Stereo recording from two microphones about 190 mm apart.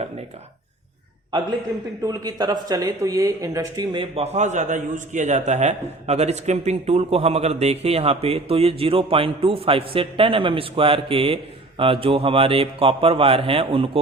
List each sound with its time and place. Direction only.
2.0 s a man's voice: 20° right (ahead or behind)